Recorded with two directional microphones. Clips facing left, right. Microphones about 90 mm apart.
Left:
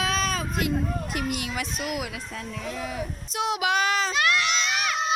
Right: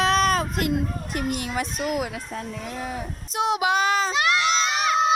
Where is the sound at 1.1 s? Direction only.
40° right (ahead or behind).